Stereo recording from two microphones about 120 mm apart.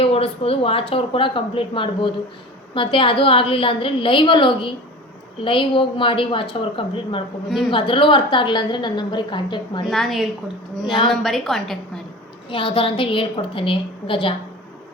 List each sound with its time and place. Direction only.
0.0 s a woman's voice: 55° left (ahead or behind)
9.8 s a woman's voice: centre (ahead or behind)
12.5 s speech: 45° left (ahead or behind)